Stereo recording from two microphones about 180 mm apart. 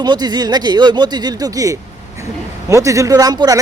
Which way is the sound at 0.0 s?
25° right (ahead or behind).